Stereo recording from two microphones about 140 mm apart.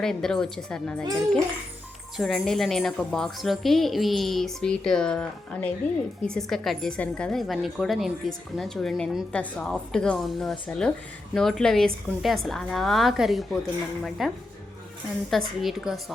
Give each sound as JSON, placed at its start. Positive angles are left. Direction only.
{"t": 0.0, "sound": "a woman's voice", "side_deg": 5}
{"t": 2.1, "sound": "a woman's voice", "side_deg": 0}